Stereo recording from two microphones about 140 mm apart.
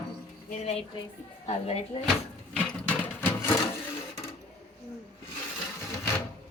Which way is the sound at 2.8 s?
15° left (ahead or behind).